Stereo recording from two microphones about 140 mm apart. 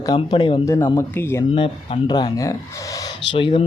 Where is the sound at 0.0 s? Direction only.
30° left (ahead or behind).